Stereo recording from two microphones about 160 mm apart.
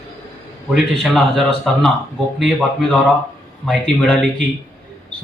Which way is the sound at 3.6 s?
Centre (ahead or behind).